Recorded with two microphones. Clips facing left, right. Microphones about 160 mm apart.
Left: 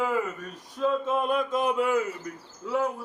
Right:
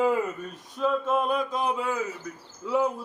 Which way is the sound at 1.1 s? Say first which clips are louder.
Even; centre (ahead or behind).